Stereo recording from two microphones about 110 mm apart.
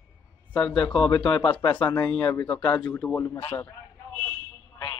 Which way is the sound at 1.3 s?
50° left (ahead or behind).